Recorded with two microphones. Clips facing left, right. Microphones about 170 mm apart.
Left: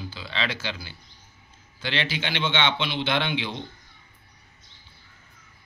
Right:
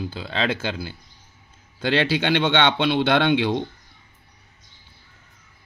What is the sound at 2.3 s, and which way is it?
A man's voice, 60° right (ahead or behind).